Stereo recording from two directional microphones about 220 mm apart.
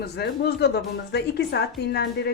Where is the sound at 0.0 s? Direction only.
50° left (ahead or behind).